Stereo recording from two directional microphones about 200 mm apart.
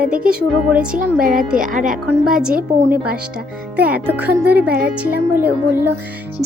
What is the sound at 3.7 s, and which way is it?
A child's voice, 5° right (ahead or behind).